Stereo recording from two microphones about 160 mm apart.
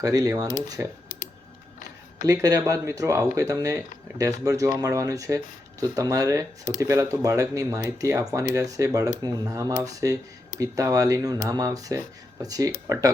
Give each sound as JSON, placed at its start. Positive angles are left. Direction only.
{"t": 0.0, "sound": "speech", "side_deg": -25}
{"t": 2.2, "sound": "speech", "side_deg": -20}